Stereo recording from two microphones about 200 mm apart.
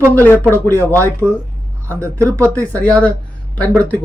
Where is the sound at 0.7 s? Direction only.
15° right (ahead or behind).